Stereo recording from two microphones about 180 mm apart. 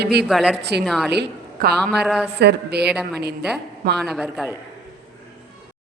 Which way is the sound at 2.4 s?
65° right (ahead or behind).